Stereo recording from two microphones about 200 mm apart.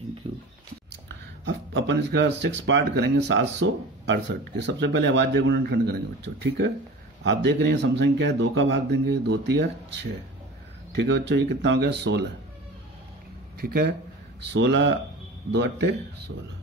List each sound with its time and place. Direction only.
0.2 s a sound: 30° right (ahead or behind)
1.4 s speech: 65° right (ahead or behind)
10.9 s speech: 60° right (ahead or behind)
13.6 s speech: 50° right (ahead or behind)
14.5 s speech: 60° right (ahead or behind)